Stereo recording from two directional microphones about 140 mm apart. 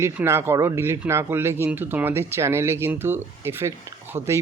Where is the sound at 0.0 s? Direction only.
20° right (ahead or behind).